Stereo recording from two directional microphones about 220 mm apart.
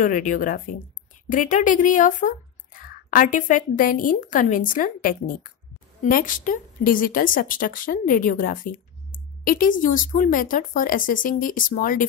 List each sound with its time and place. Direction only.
0.0 s a woman's voice: 35° left (ahead or behind)